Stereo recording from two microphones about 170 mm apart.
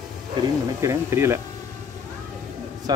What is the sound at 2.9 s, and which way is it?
Speech, 25° right (ahead or behind).